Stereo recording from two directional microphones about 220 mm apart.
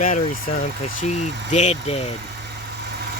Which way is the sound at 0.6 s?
30° left (ahead or behind).